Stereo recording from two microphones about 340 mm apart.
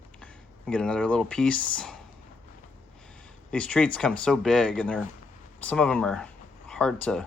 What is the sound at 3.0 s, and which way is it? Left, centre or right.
Speech, centre.